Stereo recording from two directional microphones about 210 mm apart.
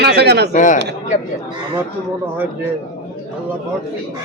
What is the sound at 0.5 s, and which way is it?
Speech, 35° left (ahead or behind).